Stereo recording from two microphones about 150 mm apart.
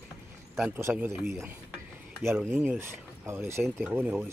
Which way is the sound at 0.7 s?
15° right (ahead or behind).